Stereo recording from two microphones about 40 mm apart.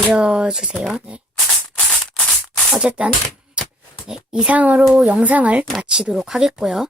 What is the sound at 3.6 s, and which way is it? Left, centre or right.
Beatboxing, right.